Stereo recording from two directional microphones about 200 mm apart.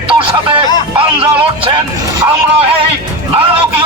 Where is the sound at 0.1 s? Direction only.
25° right (ahead or behind).